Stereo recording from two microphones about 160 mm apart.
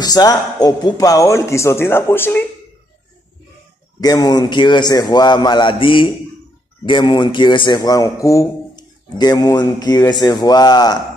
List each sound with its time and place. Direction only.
0.0 s a man's voice: 25° left (ahead or behind)
4.0 s a man's voice: 25° left (ahead or behind)